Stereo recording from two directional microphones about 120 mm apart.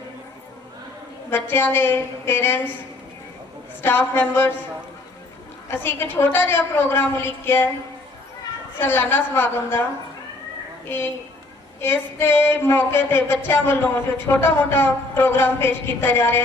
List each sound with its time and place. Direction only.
1.3 s speech: 20° left (ahead or behind)
3.8 s speech: 20° left (ahead or behind)
5.6 s speech: 20° left (ahead or behind)
8.8 s speech: 20° left (ahead or behind)
10.8 s speech: 20° left (ahead or behind)